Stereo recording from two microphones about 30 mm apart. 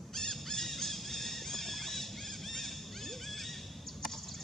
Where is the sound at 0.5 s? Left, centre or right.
Centre.